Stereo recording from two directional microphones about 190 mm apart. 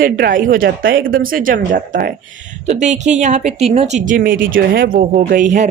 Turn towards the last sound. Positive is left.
turn(degrees=-40)  # may be behind; listen again after turning